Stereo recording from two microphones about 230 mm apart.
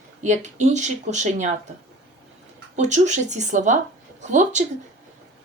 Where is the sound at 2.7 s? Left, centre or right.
Right.